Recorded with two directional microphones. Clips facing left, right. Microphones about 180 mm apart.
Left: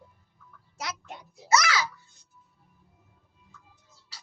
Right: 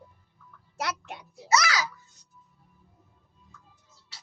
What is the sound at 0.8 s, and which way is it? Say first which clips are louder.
Music: right 4 dB; 70° right (ahead or behind).